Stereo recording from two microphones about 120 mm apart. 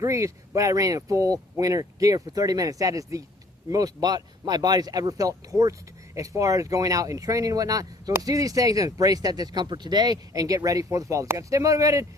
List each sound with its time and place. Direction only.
0.0 s speech: 25° right (ahead or behind)